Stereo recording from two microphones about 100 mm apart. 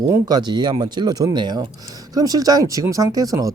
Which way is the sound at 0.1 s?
40° right (ahead or behind).